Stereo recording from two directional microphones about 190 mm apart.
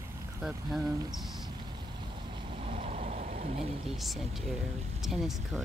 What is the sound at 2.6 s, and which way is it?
Vehicle, 35° right (ahead or behind).